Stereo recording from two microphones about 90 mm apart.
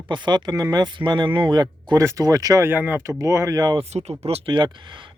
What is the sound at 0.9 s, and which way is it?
Speech, 60° right (ahead or behind).